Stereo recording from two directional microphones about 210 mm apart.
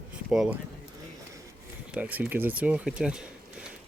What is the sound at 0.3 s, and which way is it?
Speech, 5° right (ahead or behind).